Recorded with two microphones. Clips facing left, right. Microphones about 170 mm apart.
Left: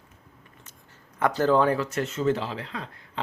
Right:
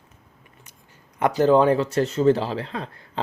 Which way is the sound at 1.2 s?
20° right (ahead or behind).